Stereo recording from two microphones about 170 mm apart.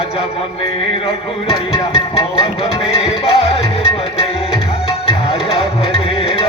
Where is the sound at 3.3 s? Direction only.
35° left (ahead or behind).